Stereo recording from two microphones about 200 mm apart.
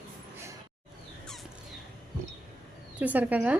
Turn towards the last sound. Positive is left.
turn(degrees=-5)  # may be behind; listen again after turning